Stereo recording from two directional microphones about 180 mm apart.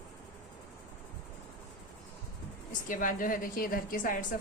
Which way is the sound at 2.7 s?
45° left (ahead or behind).